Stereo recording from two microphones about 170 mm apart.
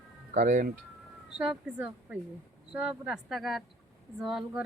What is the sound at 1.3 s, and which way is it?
A woman's voice, 5° right (ahead or behind).